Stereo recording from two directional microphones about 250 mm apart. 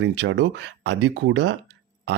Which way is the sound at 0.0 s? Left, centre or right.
Right.